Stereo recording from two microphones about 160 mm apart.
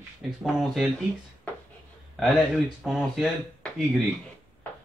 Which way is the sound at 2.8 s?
5° right (ahead or behind).